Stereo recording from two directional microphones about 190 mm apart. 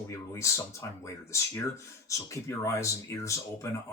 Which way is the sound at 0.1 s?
15° left (ahead or behind).